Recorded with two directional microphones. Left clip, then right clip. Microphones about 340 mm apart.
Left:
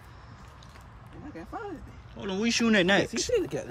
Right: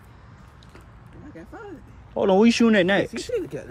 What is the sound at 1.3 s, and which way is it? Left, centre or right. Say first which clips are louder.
Speech: left 2 dB; left.